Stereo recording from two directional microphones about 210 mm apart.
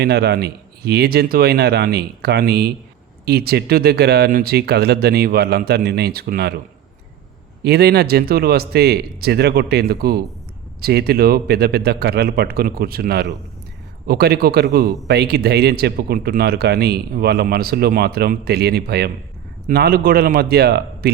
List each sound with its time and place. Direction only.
0.0 s speech: 50° right (ahead or behind)
7.6 s speech: 50° right (ahead or behind)